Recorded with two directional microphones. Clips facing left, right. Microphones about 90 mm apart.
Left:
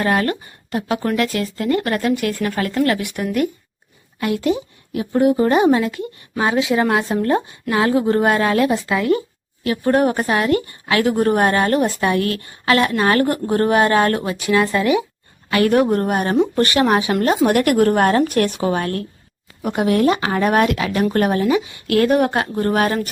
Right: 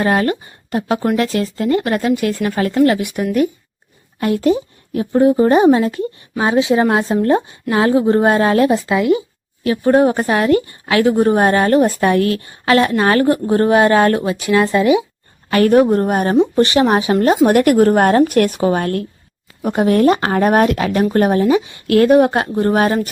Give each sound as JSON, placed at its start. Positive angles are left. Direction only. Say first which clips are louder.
{"t": 0.0, "sound": "a woman's voice", "louder": "right 3 dB", "side_deg": -20}
{"t": 4.2, "sound": "a woman's voice", "louder": "right 4 dB", "side_deg": -35}
{"t": 8.9, "sound": "speech", "louder": "right 3 dB", "side_deg": -15}
{"t": 9.6, "sound": "a woman's voice", "louder": "right 4 dB", "side_deg": -25}
{"t": 15.4, "sound": "a woman's voice", "louder": "right 4 dB", "side_deg": -35}